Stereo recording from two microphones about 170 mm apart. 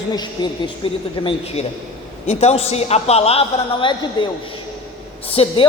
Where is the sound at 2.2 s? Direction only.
40° left (ahead or behind).